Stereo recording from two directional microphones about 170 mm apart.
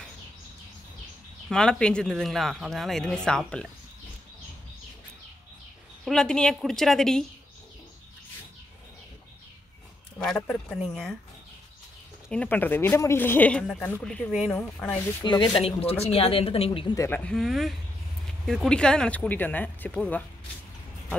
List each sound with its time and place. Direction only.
1.5 s speech: 5° left (ahead or behind)
6.0 s speech: 5° left (ahead or behind)
10.1 s speech: 5° left (ahead or behind)
12.3 s speech: 10° left (ahead or behind)
15.2 s speech: 25° left (ahead or behind)
15.6 s speech: 35° left (ahead or behind)
16.9 s speech: 15° left (ahead or behind)
17.2 s speech: centre (ahead or behind)